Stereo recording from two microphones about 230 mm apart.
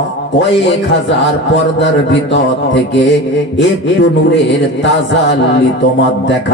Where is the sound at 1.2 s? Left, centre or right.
Left.